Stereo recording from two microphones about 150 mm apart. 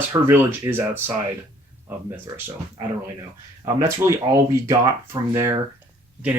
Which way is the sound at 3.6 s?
20° right (ahead or behind).